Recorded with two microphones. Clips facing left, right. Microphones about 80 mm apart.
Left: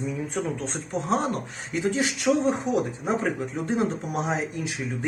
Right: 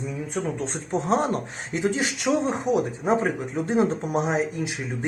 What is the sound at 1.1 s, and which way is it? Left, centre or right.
Speech, right.